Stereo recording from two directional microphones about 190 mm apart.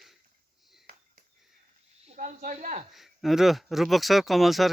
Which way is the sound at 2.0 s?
40° right (ahead or behind).